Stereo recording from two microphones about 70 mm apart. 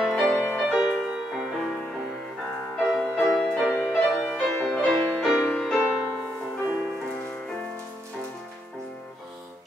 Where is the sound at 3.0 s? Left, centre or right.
Centre.